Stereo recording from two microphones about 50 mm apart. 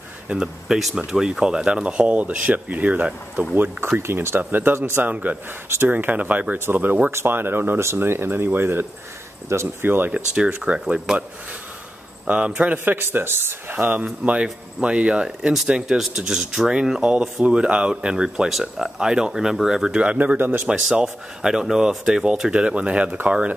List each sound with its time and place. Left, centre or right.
0.4 s speech: centre; by 3.1 s right
3.5 s speech: right
4.0 s speech: right
5.1 s speech: right
7.1 s speech: right
9.8 s speech: right
10.1 s speech: right
12.3 s speech: right
12.7 s speech: right
14.2 s speech: right
20.1 s speech: right
20.3 s speech: right
20.6 s speech: centre